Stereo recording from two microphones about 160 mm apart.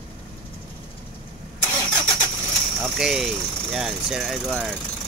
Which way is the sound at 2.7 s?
5° right (ahead or behind).